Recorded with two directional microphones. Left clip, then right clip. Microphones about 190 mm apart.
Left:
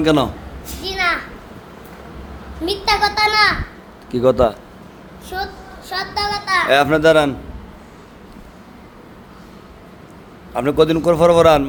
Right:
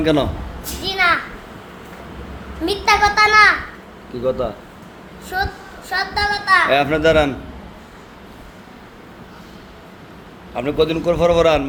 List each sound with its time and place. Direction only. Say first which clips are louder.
0.0 s speech: left 2 dB; 30° left (ahead or behind)
0.8 s a sound: right 3 dB; centre (ahead or behind)
2.6 s a child's voice: right 2 dB; 5° left (ahead or behind)
4.1 s speech: left 7 dB; 50° left (ahead or behind)
5.3 s a child's voice: right 3 dB; 5° left (ahead or behind)
6.7 s speech: left 2 dB; 30° left (ahead or behind)
10.5 s a man's voice: left 3 dB; 35° left (ahead or behind)